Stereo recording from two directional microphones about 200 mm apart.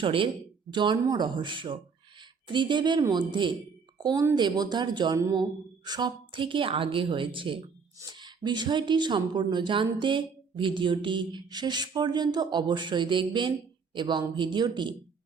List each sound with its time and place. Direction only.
0.0 s a woman's voice: 25° right (ahead or behind)